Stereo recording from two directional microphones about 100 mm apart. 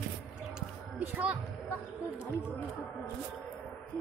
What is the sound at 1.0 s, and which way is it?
Speech, 15° right (ahead or behind).